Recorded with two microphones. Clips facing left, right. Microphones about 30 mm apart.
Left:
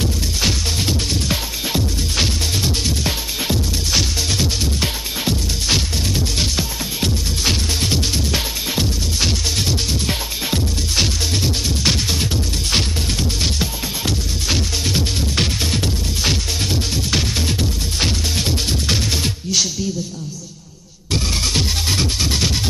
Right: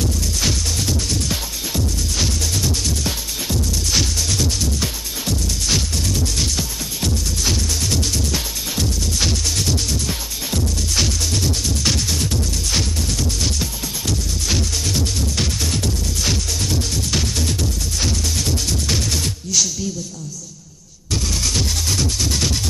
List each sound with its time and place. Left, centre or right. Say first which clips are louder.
0.0 s music: left 1 dB; left
21.1 s music: left 2 dB; left